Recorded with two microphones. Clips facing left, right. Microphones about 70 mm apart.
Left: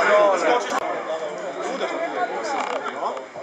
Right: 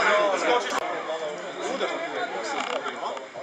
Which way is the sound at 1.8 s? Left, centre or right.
Centre.